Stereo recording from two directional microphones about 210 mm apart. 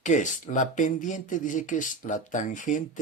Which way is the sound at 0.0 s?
35° left (ahead or behind).